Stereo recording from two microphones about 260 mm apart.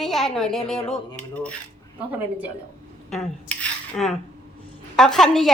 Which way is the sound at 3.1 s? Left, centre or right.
Centre.